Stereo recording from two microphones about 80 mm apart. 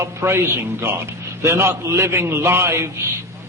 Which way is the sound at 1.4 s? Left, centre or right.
Right.